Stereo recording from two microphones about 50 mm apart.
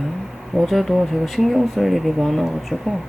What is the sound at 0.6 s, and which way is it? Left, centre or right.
A woman's voice, centre.